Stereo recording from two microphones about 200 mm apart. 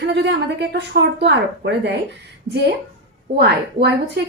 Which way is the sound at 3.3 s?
55° right (ahead or behind).